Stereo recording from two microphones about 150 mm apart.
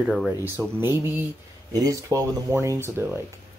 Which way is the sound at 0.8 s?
15° right (ahead or behind).